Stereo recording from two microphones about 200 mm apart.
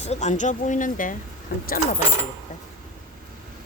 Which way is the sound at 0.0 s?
35° left (ahead or behind).